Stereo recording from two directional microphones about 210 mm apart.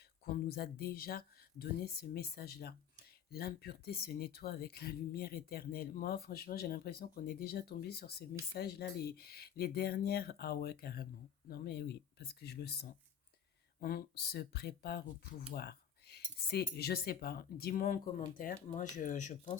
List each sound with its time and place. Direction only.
0.3 s speech: 45° left (ahead or behind)